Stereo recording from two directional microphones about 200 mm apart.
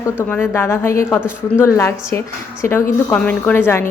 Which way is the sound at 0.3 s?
10° left (ahead or behind).